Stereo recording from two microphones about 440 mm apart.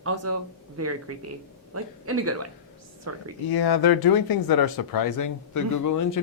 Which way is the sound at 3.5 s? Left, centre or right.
Left.